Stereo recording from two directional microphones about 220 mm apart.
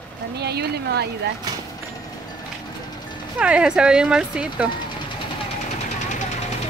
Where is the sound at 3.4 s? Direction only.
5° right (ahead or behind).